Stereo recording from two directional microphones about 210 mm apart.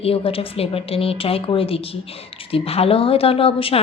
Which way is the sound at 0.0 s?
25° left (ahead or behind).